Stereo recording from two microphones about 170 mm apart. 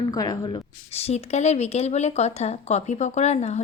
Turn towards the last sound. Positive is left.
turn(degrees=40)  # may be behind; listen again after turning